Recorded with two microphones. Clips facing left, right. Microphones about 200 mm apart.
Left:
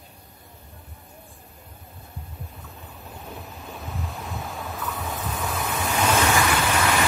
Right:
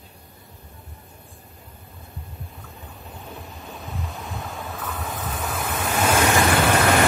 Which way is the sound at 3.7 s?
Centre (ahead or behind).